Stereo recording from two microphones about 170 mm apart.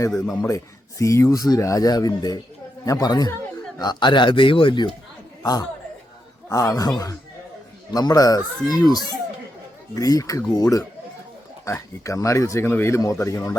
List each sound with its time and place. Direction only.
0.4 s speech: 20° left (ahead or behind)
6.5 s speech: 20° left (ahead or behind)